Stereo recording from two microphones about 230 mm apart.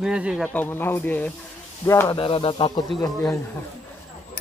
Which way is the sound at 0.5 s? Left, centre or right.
Centre.